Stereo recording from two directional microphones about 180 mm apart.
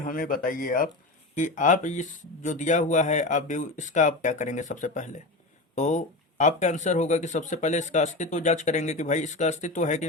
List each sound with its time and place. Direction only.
0.0 s speech: 50° left (ahead or behind)